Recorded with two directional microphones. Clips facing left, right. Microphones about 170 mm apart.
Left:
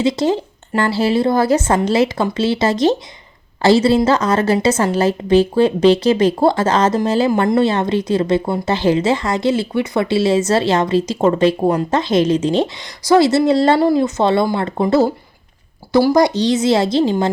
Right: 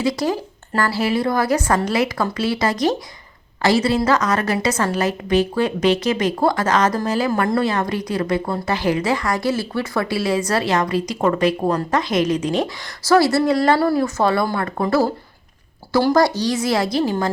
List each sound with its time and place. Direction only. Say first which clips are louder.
0.0 s a woman's voice: left 4 dB; 25° left (ahead or behind)